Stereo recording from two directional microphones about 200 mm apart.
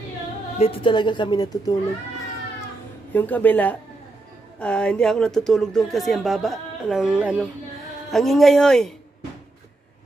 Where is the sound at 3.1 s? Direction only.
10° left (ahead or behind).